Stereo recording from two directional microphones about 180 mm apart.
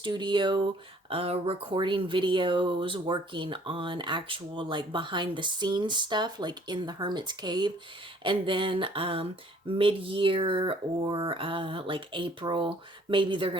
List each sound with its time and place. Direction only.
0.0 s speech: 25° right (ahead or behind)